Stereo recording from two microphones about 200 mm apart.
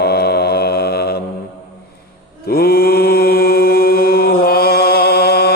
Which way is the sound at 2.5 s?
50° left (ahead or behind).